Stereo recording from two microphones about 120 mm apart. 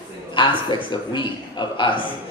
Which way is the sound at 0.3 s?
40° left (ahead or behind).